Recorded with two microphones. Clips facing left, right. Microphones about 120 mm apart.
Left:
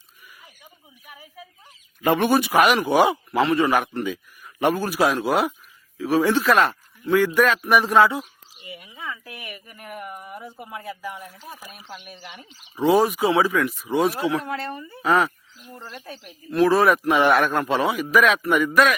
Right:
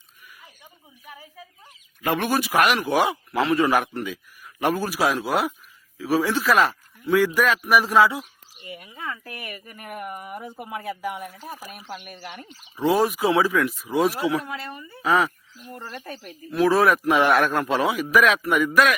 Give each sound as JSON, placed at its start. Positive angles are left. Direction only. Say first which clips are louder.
{"t": 2.0, "sound": "speech", "louder": "left 4 dB", "side_deg": 0}
{"t": 9.0, "sound": "a sound", "louder": "right 1 dB", "side_deg": 0}
{"t": 9.5, "sound": "speech", "louder": "left 1 dB", "side_deg": 0}
{"t": 14.7, "sound": "speech", "louder": "left 4 dB", "side_deg": 20}
{"t": 15.0, "sound": "speech", "louder": "left 1 dB", "side_deg": 0}